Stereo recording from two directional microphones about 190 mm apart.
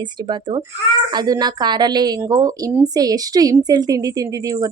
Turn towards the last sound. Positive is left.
turn(degrees=-20)  # may be behind; listen again after turning